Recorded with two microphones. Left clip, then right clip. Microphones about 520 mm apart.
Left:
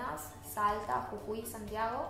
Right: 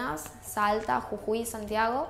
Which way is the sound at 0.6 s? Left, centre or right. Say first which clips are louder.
Right 6 dB; right.